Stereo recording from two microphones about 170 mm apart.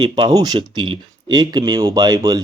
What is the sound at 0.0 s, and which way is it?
Speech, 25° right (ahead or behind).